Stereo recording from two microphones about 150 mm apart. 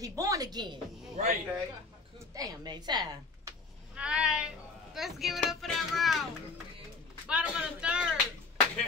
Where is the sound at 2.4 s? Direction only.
25° right (ahead or behind).